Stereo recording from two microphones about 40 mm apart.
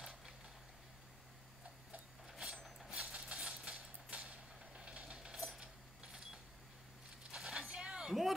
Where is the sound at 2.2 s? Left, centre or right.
Centre.